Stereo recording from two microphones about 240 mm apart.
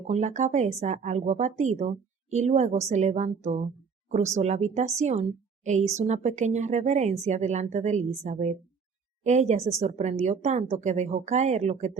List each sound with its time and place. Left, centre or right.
0.1 s a woman's voice: right